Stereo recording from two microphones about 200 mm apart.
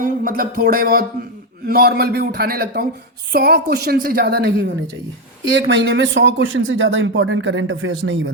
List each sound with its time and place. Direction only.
0.0 s a sound: 45° right (ahead or behind)
1.6 s a woman's voice: 50° right (ahead or behind)
5.6 s speech: 65° right (ahead or behind)